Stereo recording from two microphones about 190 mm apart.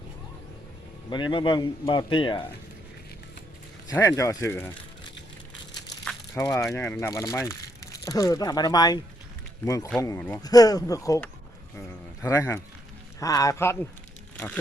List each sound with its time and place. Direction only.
1.1 s a man's voice: 25° left (ahead or behind)
3.8 s speech: 20° left (ahead or behind)
6.5 s speech: centre (ahead or behind)
7.0 s a man's voice: 20° left (ahead or behind)
12.2 s speech: 15° left (ahead or behind)